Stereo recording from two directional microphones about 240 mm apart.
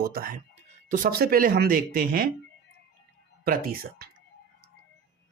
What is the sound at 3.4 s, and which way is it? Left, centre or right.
Speech, right.